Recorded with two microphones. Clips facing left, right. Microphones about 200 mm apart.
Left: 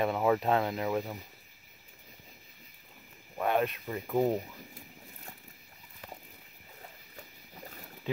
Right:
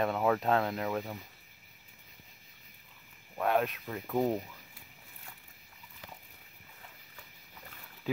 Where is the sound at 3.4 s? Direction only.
Centre (ahead or behind).